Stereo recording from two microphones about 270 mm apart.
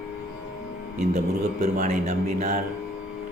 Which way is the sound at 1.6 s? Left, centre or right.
Right.